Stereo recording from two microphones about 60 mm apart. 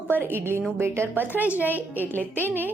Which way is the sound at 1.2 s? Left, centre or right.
Right.